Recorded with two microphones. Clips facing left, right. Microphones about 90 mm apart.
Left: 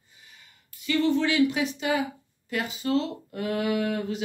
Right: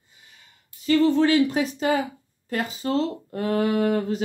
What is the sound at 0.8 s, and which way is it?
Speech, 40° right (ahead or behind).